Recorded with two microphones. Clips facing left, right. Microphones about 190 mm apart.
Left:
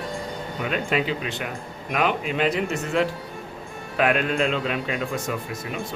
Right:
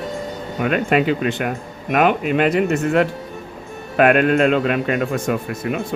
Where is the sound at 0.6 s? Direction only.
60° right (ahead or behind).